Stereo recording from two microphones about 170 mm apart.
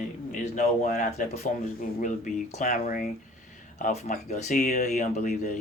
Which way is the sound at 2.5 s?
45° left (ahead or behind).